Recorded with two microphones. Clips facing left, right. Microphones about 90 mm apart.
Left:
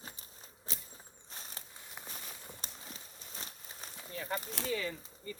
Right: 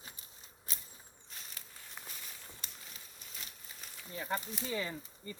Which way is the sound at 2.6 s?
35° left (ahead or behind).